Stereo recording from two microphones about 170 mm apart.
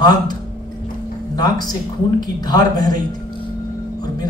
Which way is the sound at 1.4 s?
25° left (ahead or behind).